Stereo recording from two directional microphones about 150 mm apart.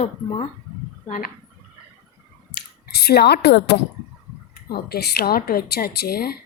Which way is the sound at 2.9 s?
90° left.